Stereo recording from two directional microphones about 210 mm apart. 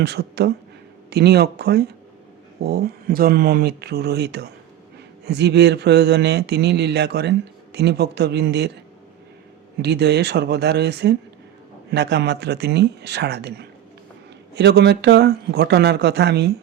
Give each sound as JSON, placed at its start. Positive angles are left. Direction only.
{"t": 0.0, "sound": "speech", "side_deg": -50}
{"t": 9.8, "sound": "speech", "side_deg": -50}